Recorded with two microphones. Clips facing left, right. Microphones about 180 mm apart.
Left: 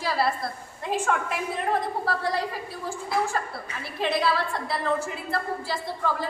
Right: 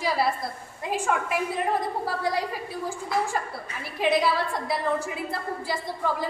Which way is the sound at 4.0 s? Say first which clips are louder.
Right 2 dB; 15° right (ahead or behind).